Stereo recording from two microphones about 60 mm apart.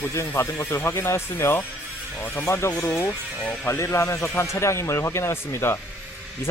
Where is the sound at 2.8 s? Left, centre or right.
Left.